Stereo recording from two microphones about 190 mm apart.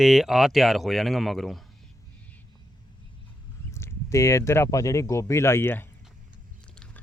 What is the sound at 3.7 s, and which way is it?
Speech, 15° left (ahead or behind).